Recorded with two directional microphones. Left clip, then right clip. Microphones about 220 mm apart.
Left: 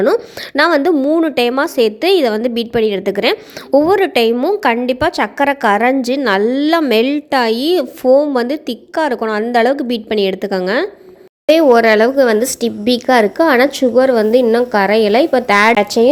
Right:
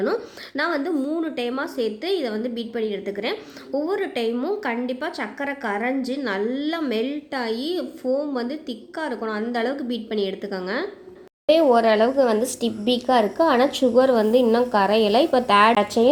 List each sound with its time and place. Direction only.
0.0 s a woman's voice: 40° left (ahead or behind)
11.4 s a woman's voice: 25° left (ahead or behind)